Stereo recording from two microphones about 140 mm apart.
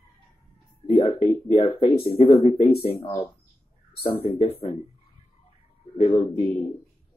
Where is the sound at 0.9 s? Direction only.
45° left (ahead or behind).